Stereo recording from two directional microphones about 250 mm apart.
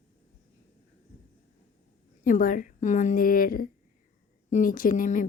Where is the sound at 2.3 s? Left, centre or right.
Left.